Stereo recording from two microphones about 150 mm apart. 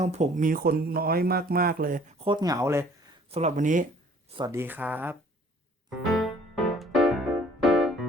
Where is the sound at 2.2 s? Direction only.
25° right (ahead or behind).